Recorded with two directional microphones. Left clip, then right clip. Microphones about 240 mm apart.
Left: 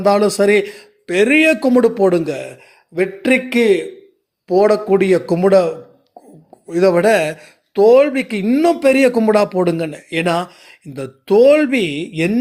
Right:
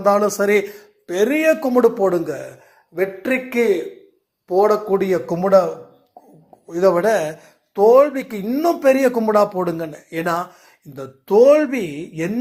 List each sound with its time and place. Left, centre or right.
0.0 s speech: left
1.4 s speech: left
1.6 s speech: left
4.9 s speech: left
6.7 s speech: left